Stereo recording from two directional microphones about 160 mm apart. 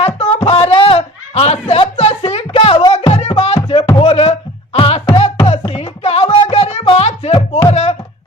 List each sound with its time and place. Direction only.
0.0 s music: 40° left (ahead or behind)
0.7 s a sound: 35° left (ahead or behind)
4.0 s music: 40° left (ahead or behind)